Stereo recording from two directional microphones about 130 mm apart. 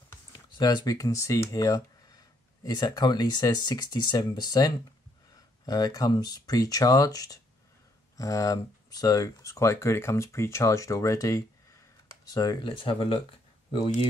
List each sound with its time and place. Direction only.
0.6 s speech: 30° left (ahead or behind)